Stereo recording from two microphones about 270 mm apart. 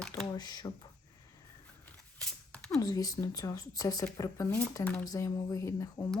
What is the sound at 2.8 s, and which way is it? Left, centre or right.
Speech, centre.